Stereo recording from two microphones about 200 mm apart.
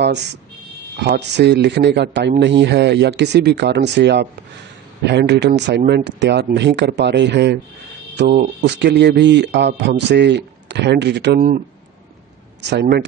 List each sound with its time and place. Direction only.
0.9 s speech: 60° right (ahead or behind)
12.6 s speech: 55° right (ahead or behind)